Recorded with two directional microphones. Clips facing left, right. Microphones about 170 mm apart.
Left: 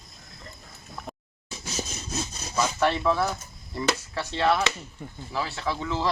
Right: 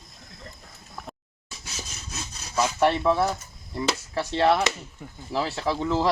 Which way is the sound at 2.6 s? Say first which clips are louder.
Right 2 dB; 25° right (ahead or behind).